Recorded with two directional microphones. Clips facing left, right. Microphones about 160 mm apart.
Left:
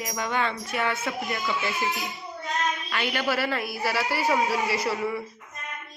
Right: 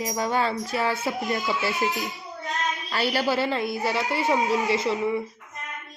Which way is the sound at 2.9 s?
35° right (ahead or behind).